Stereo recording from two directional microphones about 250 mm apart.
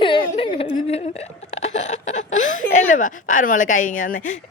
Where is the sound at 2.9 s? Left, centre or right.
Left.